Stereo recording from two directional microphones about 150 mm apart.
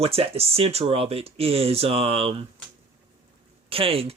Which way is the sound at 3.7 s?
40° right (ahead or behind).